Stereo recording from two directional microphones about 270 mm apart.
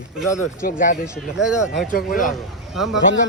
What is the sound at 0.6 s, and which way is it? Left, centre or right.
Speech, left.